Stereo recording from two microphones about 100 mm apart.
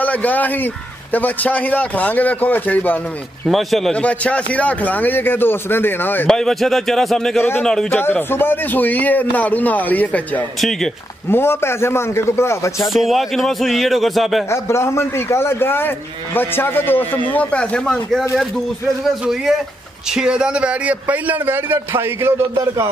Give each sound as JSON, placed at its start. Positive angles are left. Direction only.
{"t": 0.0, "sound": "a man's voice", "side_deg": 15}
{"t": 3.4, "sound": "a man's voice", "side_deg": 0}
{"t": 6.2, "sound": "a man's voice", "side_deg": 5}
{"t": 7.3, "sound": "a man's voice", "side_deg": 20}
{"t": 7.6, "sound": "a man's voice", "side_deg": 5}
{"t": 8.0, "sound": "a man's voice", "side_deg": 20}
{"t": 10.6, "sound": "a man's voice", "side_deg": 5}
{"t": 11.2, "sound": "a man's voice", "side_deg": 25}
{"t": 12.8, "sound": "a man's voice", "side_deg": 0}
{"t": 14.5, "sound": "a man's voice", "side_deg": 30}
{"t": 20.1, "sound": "a man's voice", "side_deg": -5}